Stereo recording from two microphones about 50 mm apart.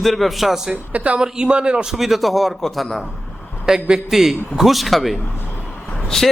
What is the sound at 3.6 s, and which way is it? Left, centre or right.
A man's voice, centre.